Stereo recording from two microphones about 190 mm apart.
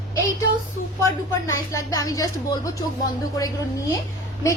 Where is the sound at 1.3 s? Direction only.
15° left (ahead or behind).